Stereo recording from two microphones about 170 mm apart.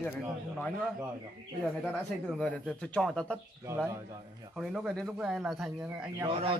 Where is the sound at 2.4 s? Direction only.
5° left (ahead or behind).